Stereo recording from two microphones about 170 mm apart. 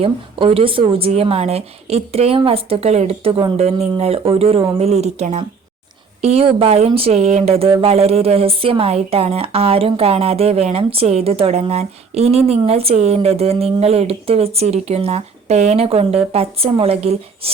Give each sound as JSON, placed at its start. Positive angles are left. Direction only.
{"t": 0.0, "sound": "speech", "side_deg": -35}